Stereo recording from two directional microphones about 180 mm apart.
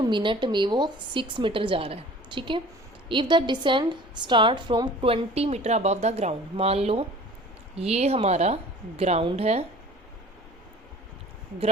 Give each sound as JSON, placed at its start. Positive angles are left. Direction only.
{"t": 0.0, "sound": "a woman's voice", "side_deg": -25}